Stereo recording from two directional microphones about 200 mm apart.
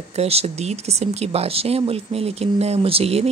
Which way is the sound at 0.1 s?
30° right (ahead or behind).